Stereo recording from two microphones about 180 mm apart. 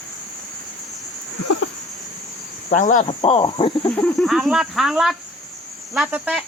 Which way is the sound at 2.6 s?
45° left (ahead or behind).